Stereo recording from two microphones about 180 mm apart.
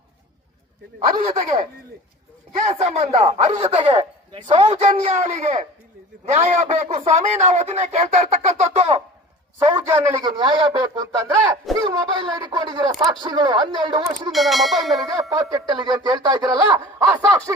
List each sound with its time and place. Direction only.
1.1 s speech: 20° right (ahead or behind)
2.6 s a man's voice: 40° right (ahead or behind)
9.7 s speech: 15° right (ahead or behind)
14.3 s speech: centre (ahead or behind)
15.1 s speech: 20° right (ahead or behind)